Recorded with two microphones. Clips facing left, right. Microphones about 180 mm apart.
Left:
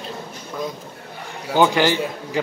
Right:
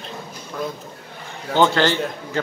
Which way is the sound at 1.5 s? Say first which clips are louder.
Left 1 dB; 10° left (ahead or behind).